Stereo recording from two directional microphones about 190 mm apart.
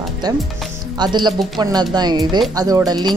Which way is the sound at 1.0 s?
25° right (ahead or behind).